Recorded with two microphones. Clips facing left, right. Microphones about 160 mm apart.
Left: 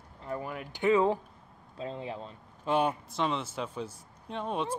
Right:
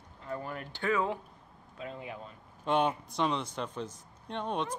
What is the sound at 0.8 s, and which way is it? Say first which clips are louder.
Speech: left 6 dB; 25° left (ahead or behind).